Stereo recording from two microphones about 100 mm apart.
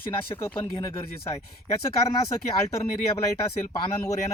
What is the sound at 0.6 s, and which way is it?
Speech, 35° left (ahead or behind).